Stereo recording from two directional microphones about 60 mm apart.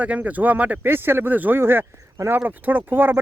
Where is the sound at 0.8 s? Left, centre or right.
Right.